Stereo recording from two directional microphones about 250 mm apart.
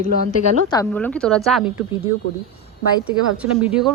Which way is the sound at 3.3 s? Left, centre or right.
Centre.